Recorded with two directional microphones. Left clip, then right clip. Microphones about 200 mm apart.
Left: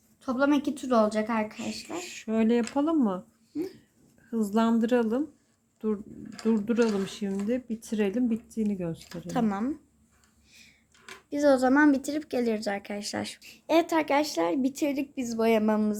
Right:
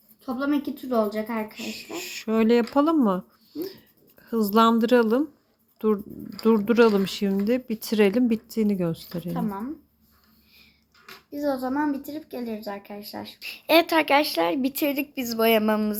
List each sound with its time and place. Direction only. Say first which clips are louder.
0.2 s a woman's voice: left 1 dB; 55° left (ahead or behind)
1.5 s speech: right 2 dB; 15° right (ahead or behind)
9.3 s a woman's voice: left 3 dB; 55° left (ahead or behind)
11.3 s a woman's voice: left 5 dB; 45° left (ahead or behind)
13.4 s speech: right 6 dB; centre (ahead or behind)